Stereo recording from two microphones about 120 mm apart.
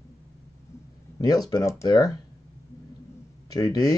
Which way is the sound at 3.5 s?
30° left (ahead or behind).